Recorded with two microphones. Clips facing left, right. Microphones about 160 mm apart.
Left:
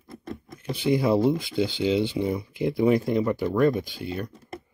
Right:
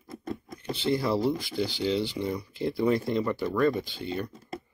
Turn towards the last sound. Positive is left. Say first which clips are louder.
# left 1 dB
turn(degrees=10)  # may be behind; listen again after turning